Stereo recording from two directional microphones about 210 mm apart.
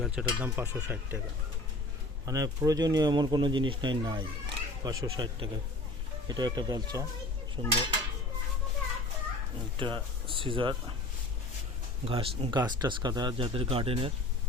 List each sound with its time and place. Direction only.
0.0 s speech: 5° right (ahead or behind)
2.2 s speech: 15° right (ahead or behind)
9.7 s speech: 25° right (ahead or behind)
12.0 s speech: 25° right (ahead or behind)